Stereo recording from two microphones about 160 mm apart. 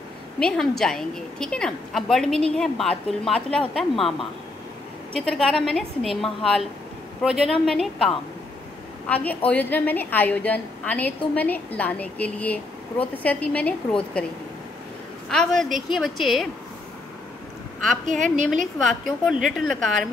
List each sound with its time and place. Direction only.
0.4 s a woman's voice: 5° left (ahead or behind)
5.1 s a woman's voice: 5° left (ahead or behind)
15.2 s a woman's voice: 5° left (ahead or behind)
18.0 s a woman's voice: 50° right (ahead or behind)
18.8 s a woman's voice: centre (ahead or behind)